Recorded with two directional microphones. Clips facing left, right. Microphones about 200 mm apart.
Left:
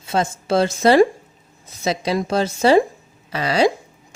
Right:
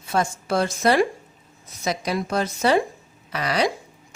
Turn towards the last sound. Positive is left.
turn(degrees=30)  # may be behind; listen again after turning